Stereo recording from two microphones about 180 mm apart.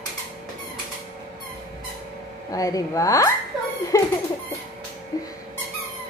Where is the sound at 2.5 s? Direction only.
20° left (ahead or behind).